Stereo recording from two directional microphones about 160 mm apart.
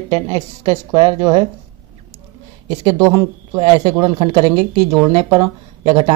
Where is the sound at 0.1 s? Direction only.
30° right (ahead or behind).